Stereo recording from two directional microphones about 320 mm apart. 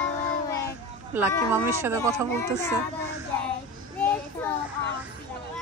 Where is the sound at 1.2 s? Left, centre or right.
Centre.